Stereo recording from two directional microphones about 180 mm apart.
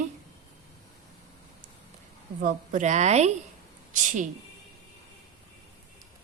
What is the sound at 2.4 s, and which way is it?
Speech, 45° right (ahead or behind).